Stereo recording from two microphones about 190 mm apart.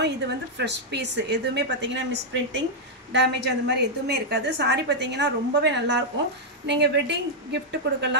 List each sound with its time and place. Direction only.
0.0 s a woman's voice: 65° right (ahead or behind)
3.1 s a woman's voice: 65° right (ahead or behind)